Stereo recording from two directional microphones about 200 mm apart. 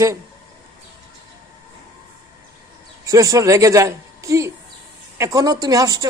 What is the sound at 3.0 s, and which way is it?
A woman's voice, 15° right (ahead or behind).